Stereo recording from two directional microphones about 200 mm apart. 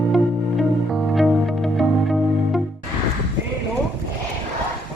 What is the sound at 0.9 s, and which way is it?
Music, centre (ahead or behind).